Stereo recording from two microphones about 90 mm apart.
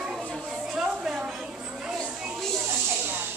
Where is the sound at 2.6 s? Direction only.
20° right (ahead or behind).